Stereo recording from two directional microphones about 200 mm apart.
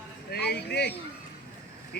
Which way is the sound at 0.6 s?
55° left (ahead or behind).